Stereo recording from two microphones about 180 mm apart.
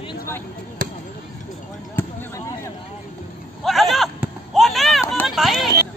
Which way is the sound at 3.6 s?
Centre (ahead or behind).